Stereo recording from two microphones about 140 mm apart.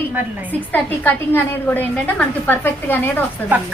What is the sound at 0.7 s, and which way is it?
A woman's voice, 15° left (ahead or behind).